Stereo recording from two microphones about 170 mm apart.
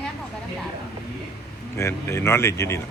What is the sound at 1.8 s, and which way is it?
Speech, 15° left (ahead or behind).